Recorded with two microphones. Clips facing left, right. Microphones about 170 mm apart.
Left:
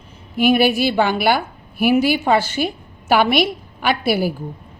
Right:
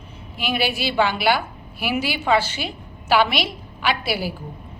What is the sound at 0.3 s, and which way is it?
A woman's voice, 50° left (ahead or behind).